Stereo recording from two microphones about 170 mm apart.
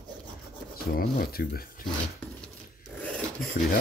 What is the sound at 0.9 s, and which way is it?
Speech, 60° left (ahead or behind).